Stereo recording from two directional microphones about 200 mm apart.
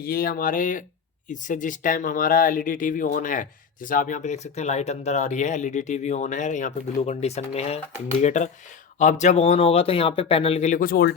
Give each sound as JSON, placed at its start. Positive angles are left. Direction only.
{"t": 0.0, "sound": "speech", "side_deg": 45}